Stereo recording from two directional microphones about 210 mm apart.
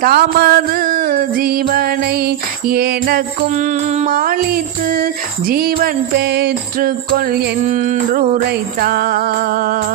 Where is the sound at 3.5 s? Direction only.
35° right (ahead or behind).